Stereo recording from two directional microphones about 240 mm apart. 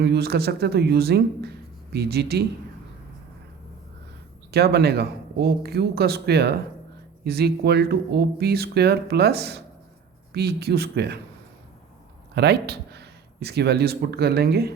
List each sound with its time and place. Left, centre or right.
0.0 s speech: right
4.5 s speech: right
12.3 s speech: right